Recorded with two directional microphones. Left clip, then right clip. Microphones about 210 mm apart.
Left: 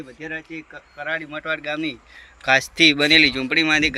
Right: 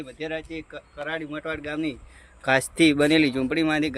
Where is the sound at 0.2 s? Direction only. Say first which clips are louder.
Even; 50° right (ahead or behind).